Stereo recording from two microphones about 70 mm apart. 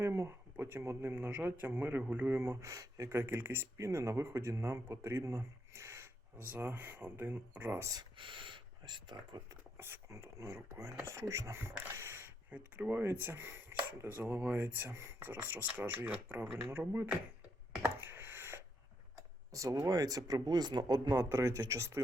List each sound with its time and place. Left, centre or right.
0.0 s a man's voice: right
2.3 s speech: right
6.5 s speech: right
8.8 s speech: right
9.5 s a man's voice: right
12.5 s speech: centre
13.0 s speech: right
17.8 s a sound: right
19.1 s a sound: right
19.9 s speech: right
21.2 s speech: right